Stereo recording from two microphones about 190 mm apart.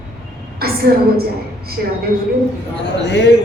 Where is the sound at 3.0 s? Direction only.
65° left (ahead or behind).